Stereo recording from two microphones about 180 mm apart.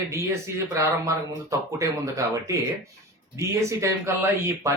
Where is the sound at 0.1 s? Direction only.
15° right (ahead or behind).